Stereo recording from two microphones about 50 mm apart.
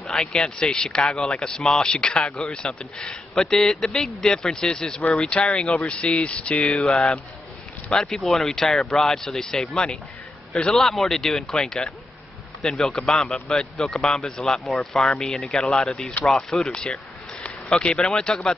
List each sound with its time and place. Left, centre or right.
0.1 s speech: centre
2.2 s a man's voice: centre
2.6 s speech: centre
6.7 s a man's voice: centre